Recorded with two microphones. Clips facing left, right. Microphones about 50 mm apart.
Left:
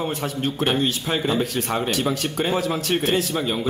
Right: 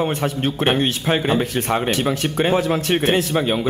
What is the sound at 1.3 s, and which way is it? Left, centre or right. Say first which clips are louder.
A man's voice: right 3 dB; right.